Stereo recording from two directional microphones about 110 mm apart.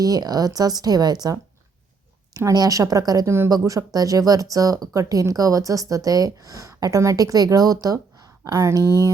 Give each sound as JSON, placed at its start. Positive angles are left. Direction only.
{"t": 0.0, "sound": "speech", "side_deg": -35}